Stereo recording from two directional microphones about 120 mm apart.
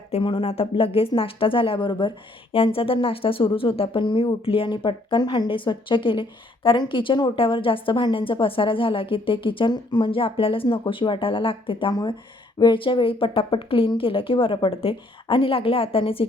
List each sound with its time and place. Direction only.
0.1 s speech: 45° left (ahead or behind)